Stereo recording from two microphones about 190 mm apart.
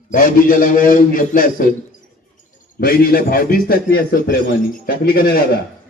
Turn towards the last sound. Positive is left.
turn(degrees=55)  # may be behind; listen again after turning